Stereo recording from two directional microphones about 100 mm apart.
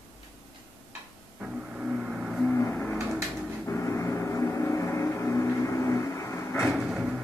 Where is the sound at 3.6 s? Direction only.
25° left (ahead or behind).